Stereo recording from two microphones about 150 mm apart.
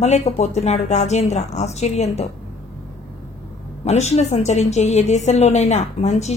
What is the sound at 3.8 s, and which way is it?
A woman's voice, 50° left (ahead or behind).